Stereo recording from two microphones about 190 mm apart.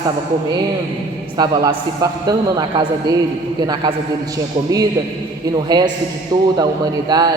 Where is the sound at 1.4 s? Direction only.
20° right (ahead or behind).